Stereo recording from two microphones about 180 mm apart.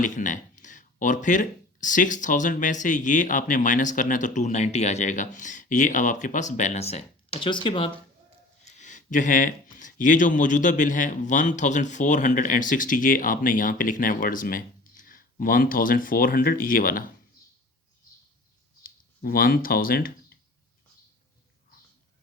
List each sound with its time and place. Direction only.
0.0 s speech: 45° left (ahead or behind); by 7.9 s 30° left (ahead or behind)
8.6 s speech: 40° left (ahead or behind)
18.8 s a sound: 55° left (ahead or behind)